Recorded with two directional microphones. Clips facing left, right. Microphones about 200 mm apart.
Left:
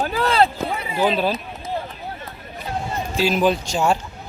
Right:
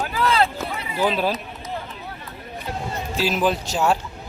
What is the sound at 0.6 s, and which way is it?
Run, 15° left (ahead or behind).